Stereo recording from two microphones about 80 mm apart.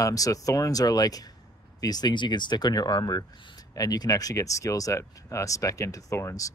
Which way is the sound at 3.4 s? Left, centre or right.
Left.